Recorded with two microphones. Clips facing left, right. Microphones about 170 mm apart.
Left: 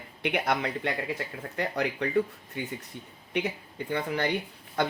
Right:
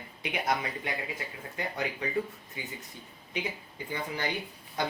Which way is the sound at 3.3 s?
65° left (ahead or behind).